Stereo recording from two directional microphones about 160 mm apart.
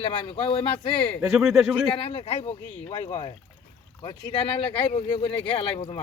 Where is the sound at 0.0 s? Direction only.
30° left (ahead or behind).